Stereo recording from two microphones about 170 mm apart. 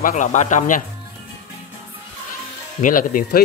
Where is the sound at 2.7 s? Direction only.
50° left (ahead or behind).